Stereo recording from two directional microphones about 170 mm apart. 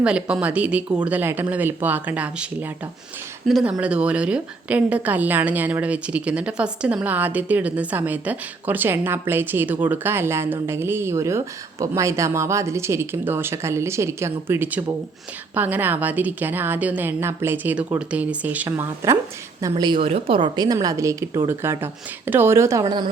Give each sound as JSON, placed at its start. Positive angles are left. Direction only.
{"t": 0.0, "sound": "a woman's voice", "side_deg": -5}
{"t": 19.7, "sound": "a woman's voice", "side_deg": -30}
{"t": 22.8, "sound": "a woman's voice", "side_deg": -25}